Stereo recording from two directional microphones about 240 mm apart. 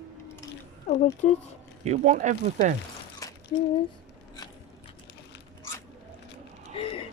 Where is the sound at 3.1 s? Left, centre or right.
Centre.